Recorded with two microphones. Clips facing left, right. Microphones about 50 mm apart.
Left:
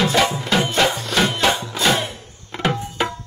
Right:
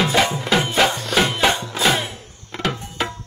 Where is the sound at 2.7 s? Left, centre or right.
Centre.